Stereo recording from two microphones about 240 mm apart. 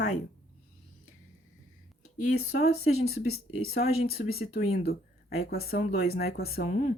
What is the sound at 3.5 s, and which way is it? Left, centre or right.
Speech, left.